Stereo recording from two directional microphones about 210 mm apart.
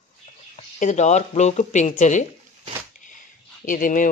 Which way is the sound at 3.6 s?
40° left (ahead or behind).